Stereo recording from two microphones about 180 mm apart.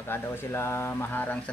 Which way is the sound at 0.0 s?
15° left (ahead or behind).